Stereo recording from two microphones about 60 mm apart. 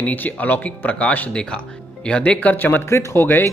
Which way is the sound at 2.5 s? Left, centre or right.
Left.